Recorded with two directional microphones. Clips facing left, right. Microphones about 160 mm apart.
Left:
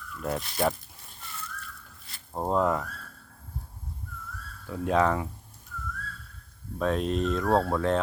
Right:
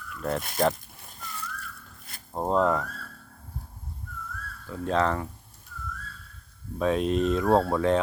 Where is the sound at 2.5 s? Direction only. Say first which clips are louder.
Right 2 dB; 10° left (ahead or behind).